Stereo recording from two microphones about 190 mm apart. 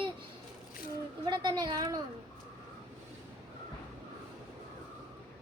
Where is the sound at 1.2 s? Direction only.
25° right (ahead or behind).